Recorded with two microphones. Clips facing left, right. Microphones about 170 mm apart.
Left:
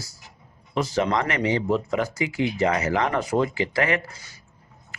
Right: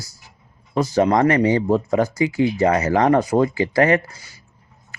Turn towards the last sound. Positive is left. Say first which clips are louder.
# right 7 dB
turn(degrees=-40)  # may be behind; listen again after turning